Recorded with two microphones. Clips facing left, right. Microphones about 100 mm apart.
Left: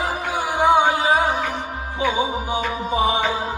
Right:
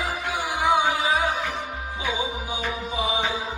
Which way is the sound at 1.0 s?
40° left (ahead or behind).